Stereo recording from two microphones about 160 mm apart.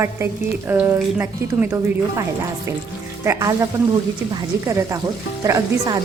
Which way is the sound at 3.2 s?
20° right (ahead or behind).